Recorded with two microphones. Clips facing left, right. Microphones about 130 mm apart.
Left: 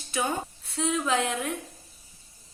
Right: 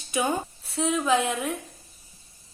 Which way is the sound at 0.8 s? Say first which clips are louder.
Right 3 dB; centre (ahead or behind).